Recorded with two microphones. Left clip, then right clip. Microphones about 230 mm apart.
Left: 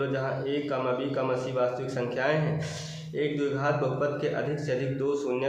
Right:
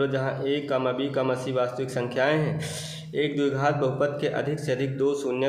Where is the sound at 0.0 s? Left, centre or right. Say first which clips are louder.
Right 3 dB; right.